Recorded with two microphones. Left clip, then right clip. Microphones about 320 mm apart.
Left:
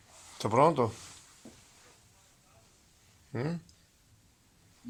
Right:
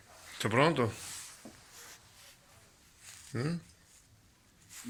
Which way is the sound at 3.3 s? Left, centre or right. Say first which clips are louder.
Left 2 dB; left.